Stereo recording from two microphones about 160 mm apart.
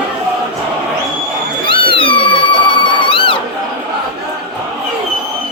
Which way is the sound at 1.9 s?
30° left (ahead or behind).